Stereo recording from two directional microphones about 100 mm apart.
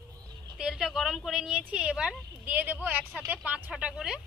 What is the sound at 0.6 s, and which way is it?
Speech, 5° right (ahead or behind).